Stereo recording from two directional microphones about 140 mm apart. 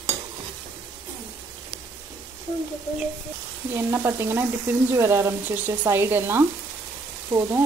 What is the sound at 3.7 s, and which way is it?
Frying, 15° right (ahead or behind).